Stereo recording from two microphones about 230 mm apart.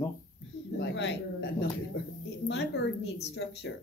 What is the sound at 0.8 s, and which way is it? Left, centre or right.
Speech, left.